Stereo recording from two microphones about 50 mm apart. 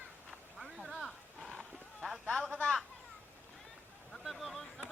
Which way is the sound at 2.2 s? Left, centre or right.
Centre.